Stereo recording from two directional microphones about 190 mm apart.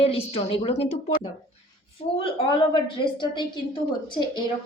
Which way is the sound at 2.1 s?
30° left (ahead or behind).